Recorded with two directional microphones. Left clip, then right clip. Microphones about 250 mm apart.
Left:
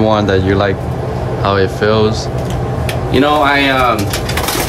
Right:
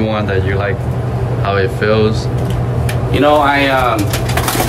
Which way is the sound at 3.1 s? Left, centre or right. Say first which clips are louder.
Even; left.